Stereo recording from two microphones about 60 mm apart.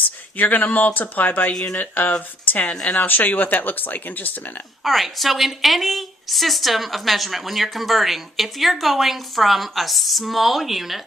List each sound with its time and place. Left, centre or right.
0.3 s speech: left
2.7 s speech: centre
3.0 s speech: left
4.8 s a woman's voice: centre